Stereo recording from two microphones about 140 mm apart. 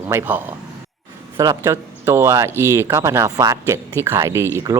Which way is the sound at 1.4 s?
25° right (ahead or behind).